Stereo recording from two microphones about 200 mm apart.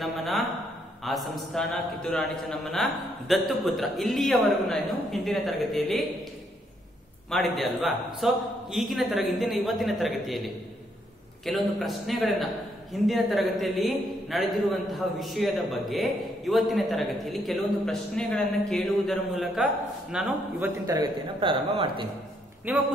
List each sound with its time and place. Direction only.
0.0 s a man's voice: centre (ahead or behind)
7.2 s a man's voice: centre (ahead or behind)
20.8 s speech: 20° right (ahead or behind)
22.7 s a man's voice: 10° right (ahead or behind)